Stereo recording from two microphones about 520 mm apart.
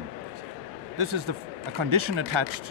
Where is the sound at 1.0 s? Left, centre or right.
Right.